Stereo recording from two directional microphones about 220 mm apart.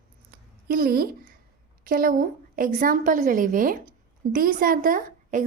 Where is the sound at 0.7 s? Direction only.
40° right (ahead or behind).